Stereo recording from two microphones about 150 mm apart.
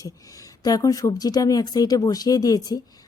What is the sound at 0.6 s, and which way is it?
Speech, 25° left (ahead or behind).